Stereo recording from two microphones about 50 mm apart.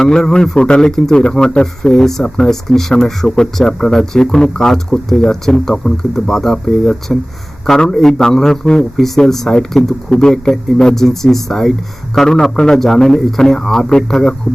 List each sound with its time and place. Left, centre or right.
0.0 s speech: centre
9.0 s speech: centre